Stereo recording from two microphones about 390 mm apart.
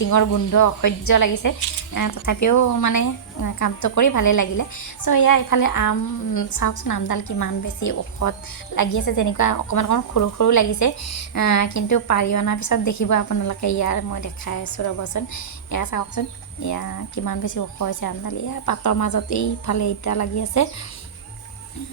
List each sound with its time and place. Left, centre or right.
0.1 s speech: left